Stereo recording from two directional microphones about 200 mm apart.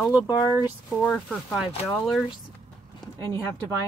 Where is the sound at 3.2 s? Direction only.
15° left (ahead or behind).